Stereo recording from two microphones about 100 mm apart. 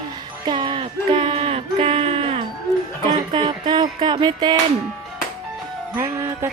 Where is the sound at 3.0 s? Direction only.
50° right (ahead or behind).